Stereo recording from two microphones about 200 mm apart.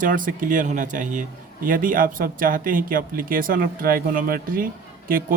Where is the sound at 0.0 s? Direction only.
40° right (ahead or behind).